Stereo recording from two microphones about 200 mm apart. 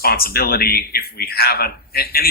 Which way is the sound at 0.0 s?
50° left (ahead or behind).